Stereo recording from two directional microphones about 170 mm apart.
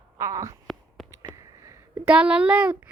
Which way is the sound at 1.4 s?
20° right (ahead or behind).